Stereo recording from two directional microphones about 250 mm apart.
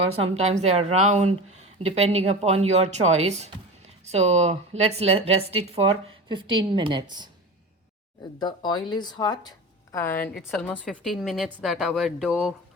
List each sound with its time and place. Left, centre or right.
0.0 s a woman's voice: right
8.4 s speech: centre